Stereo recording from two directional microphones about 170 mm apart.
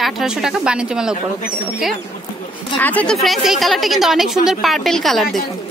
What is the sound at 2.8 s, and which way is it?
A woman's voice, 10° left (ahead or behind).